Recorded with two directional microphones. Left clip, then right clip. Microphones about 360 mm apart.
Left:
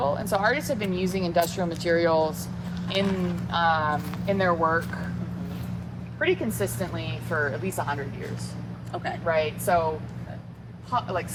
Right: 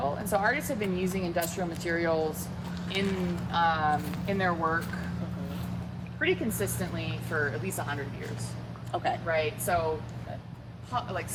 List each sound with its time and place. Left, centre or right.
0.0 s speech: centre
6.1 s speech: centre
9.2 s speech: centre
10.9 s speech: centre